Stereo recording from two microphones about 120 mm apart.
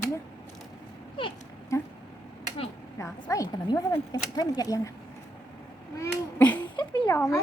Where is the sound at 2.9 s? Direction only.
25° left (ahead or behind).